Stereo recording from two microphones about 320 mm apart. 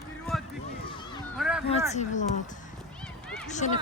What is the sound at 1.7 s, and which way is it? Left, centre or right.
Speech, left.